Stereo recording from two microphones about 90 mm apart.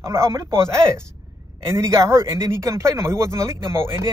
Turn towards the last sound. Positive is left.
turn(degrees=-30)  # may be behind; listen again after turning